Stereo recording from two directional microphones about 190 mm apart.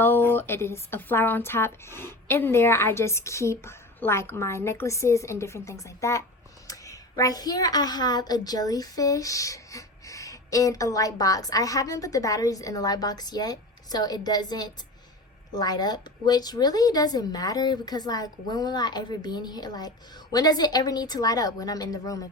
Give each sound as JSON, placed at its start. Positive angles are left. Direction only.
{"t": 0.0, "sound": "a woman's voice", "side_deg": 10}